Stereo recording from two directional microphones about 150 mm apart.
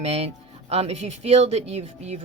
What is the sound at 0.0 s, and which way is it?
Speech, 45° right (ahead or behind).